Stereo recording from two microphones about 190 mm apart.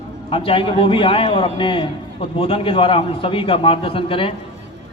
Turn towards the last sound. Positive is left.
turn(degrees=30)  # may be behind; listen again after turning